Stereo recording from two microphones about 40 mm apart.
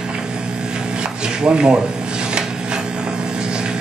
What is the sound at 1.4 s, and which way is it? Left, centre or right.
Speech, right.